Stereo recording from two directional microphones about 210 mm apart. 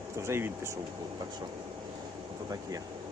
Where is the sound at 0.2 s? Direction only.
10° right (ahead or behind).